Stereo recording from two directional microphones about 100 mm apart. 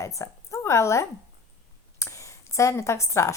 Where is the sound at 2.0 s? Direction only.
30° left (ahead or behind).